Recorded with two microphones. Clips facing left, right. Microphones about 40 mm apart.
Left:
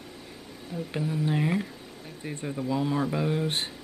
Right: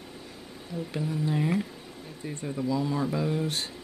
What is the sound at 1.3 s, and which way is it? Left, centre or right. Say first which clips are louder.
Speech: right 1 dB; centre.